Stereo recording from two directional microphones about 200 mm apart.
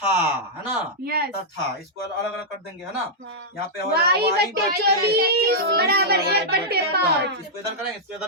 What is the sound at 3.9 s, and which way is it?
A child's voice, 50° right (ahead or behind).